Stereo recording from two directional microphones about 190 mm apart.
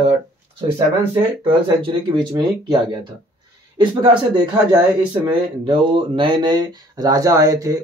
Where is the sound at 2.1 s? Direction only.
25° right (ahead or behind).